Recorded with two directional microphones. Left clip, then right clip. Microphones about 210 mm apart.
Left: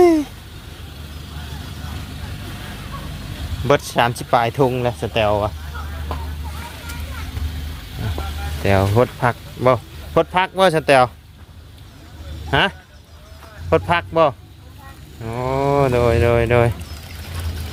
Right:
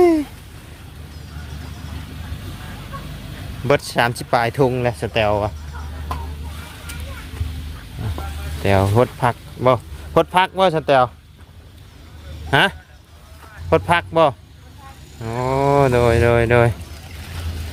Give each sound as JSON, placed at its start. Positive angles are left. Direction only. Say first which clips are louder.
{"t": 0.0, "sound": "a sound", "louder": "left 1 dB", "side_deg": 0}
{"t": 3.7, "sound": "speech", "louder": "left 1 dB", "side_deg": -5}
{"t": 8.6, "sound": "speech", "louder": "even", "side_deg": -10}
{"t": 10.5, "sound": "speech", "louder": "left 2 dB", "side_deg": 5}
{"t": 12.5, "sound": "speech", "louder": "right 2 dB", "side_deg": -15}